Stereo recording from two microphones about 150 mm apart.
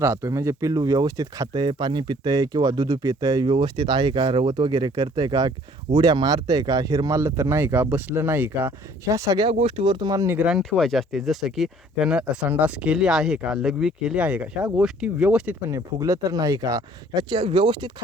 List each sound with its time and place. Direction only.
0.0 s speech: 20° right (ahead or behind)
9.5 s speech: 40° right (ahead or behind); by 10.3 s 25° right (ahead or behind)
10.3 s speech: 5° right (ahead or behind)
15.7 s speech: 20° right (ahead or behind)